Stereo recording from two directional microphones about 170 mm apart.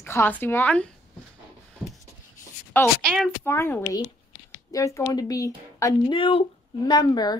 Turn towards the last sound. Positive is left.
turn(degrees=25)  # may be behind; listen again after turning